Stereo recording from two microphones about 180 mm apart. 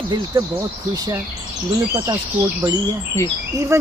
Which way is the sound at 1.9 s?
15° right (ahead or behind).